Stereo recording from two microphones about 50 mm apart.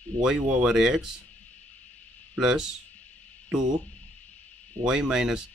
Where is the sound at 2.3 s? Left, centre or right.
Centre.